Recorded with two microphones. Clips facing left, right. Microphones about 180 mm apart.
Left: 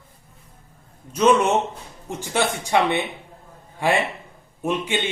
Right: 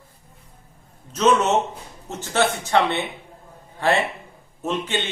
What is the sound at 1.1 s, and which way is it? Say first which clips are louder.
Speech: left 1 dB; 10° left (ahead or behind).